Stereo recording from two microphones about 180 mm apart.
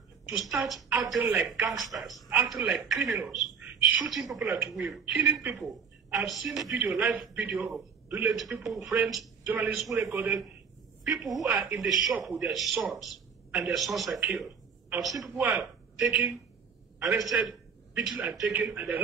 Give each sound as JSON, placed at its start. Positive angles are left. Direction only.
{"t": 0.3, "sound": "a man's voice", "side_deg": 0}
{"t": 17.1, "sound": "a man's voice", "side_deg": -15}
{"t": 17.4, "sound": "a man's voice", "side_deg": -5}